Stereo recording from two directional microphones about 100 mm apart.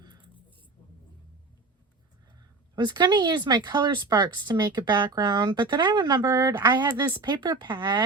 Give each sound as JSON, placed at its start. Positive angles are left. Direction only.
{"t": 2.7, "sound": "speech", "side_deg": -45}